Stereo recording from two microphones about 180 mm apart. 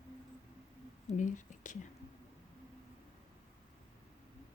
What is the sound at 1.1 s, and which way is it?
Speech, 45° left (ahead or behind).